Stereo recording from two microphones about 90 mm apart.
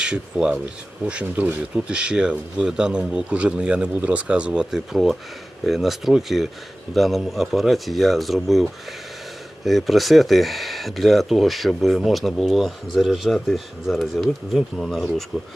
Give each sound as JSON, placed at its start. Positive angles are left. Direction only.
{"t": 0.0, "sound": "speech", "side_deg": -10}
{"t": 9.6, "sound": "speech", "side_deg": 0}